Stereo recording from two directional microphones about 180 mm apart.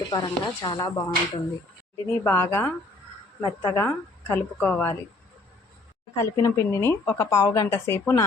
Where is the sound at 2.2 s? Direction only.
10° left (ahead or behind).